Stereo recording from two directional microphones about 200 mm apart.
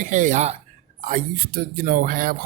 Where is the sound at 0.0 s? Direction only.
40° right (ahead or behind).